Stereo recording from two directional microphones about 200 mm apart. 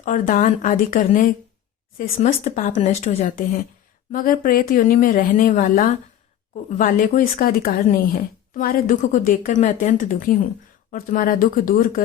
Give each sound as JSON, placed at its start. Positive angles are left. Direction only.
{"t": 0.0, "sound": "a woman's voice", "side_deg": 40}